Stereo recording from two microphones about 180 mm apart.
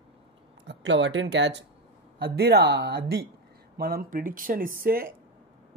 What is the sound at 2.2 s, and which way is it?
A man's voice, 65° right (ahead or behind).